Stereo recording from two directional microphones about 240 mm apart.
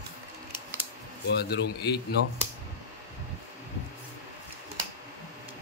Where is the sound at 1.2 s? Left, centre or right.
Left.